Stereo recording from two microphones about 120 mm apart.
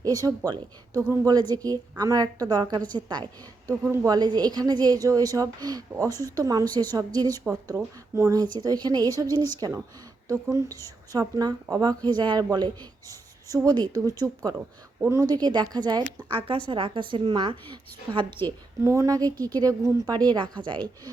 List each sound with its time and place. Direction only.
0.3 s a woman's voice: 30° right (ahead or behind)
7.4 s a woman's voice: 20° right (ahead or behind)
15.1 s a woman's voice: 30° right (ahead or behind)
16.3 s a woman's voice: 45° right (ahead or behind)
18.8 s a woman's voice: 25° right (ahead or behind)